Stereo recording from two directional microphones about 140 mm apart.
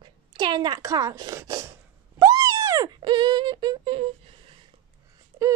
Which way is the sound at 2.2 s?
25° right (ahead or behind).